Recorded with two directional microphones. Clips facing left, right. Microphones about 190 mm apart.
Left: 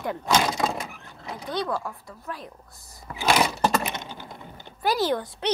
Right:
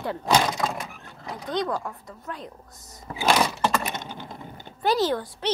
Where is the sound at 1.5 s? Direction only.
15° right (ahead or behind).